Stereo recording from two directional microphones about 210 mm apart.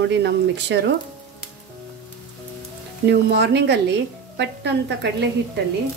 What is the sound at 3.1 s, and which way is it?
A woman's voice, 55° right (ahead or behind).